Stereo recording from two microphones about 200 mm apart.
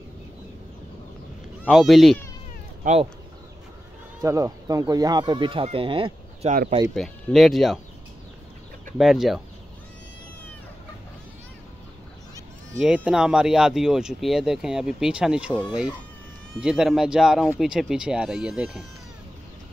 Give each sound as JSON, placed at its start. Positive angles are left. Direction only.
{"t": 1.6, "sound": "speech", "side_deg": 0}
{"t": 2.8, "sound": "speech", "side_deg": -35}
{"t": 4.2, "sound": "speech", "side_deg": -15}
{"t": 7.0, "sound": "speech", "side_deg": 0}
{"t": 8.9, "sound": "speech", "side_deg": 0}
{"t": 12.8, "sound": "speech", "side_deg": -5}
{"t": 16.6, "sound": "speech", "side_deg": 0}